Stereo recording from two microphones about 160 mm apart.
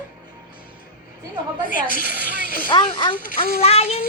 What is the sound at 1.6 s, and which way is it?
Speech, 55° left (ahead or behind).